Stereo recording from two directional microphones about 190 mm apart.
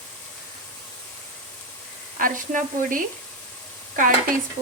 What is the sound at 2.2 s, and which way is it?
Speech, 45° right (ahead or behind).